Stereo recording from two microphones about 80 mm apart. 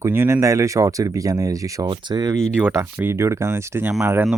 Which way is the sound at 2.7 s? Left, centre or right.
Right.